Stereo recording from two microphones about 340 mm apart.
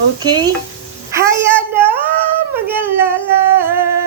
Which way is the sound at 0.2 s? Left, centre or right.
Centre.